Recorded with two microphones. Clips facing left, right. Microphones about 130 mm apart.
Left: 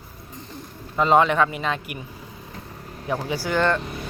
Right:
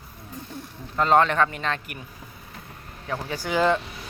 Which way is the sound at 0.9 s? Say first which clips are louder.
Left 2 dB; 5° left (ahead or behind).